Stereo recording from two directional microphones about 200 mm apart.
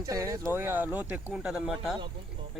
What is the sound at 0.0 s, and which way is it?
Speech, 15° right (ahead or behind).